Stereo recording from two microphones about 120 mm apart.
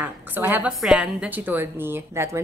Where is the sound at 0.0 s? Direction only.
15° right (ahead or behind).